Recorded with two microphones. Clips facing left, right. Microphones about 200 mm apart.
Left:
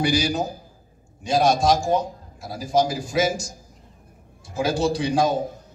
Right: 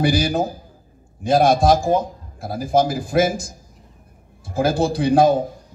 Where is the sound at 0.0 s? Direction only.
55° right (ahead or behind).